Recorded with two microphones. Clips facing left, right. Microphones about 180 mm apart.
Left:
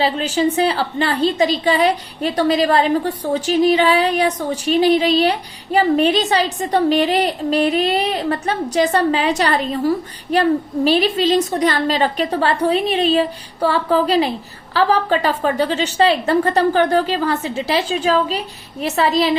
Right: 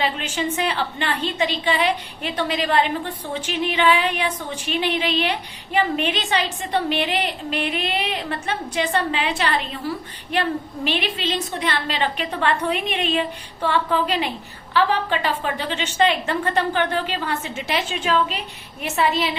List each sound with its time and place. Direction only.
0.0 s a woman's voice: 35° left (ahead or behind)